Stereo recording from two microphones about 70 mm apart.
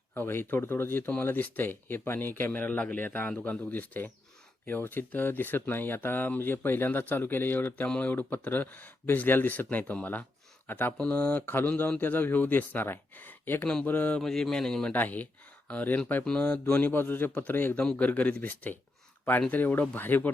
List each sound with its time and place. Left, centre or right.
0.1 s speech: left
10.9 s speech: centre
14.2 s a man's voice: centre
14.9 s speech: left
17.7 s speech: centre